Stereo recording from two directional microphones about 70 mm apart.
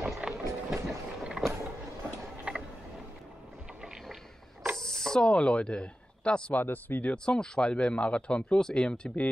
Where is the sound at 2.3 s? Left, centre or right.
Centre.